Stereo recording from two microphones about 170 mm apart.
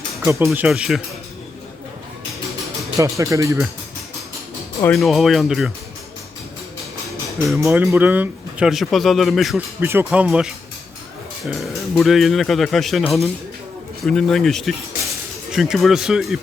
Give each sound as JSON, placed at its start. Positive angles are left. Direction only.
{"t": 0.3, "sound": "speech", "side_deg": -15}
{"t": 0.7, "sound": "speech", "side_deg": 0}
{"t": 3.0, "sound": "speech", "side_deg": -20}
{"t": 4.9, "sound": "speech", "side_deg": 0}
{"t": 7.5, "sound": "speech", "side_deg": -15}
{"t": 9.8, "sound": "speech", "side_deg": -15}
{"t": 10.1, "sound": "speech", "side_deg": -5}